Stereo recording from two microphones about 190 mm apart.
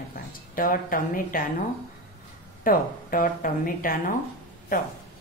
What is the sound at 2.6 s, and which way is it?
A woman's voice, 45° left (ahead or behind).